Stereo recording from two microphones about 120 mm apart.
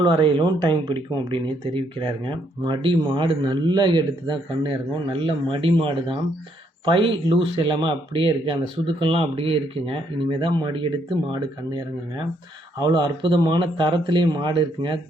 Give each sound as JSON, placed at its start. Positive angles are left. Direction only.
{"t": 0.0, "sound": "speech", "side_deg": -40}
{"t": 12.8, "sound": "speech", "side_deg": -40}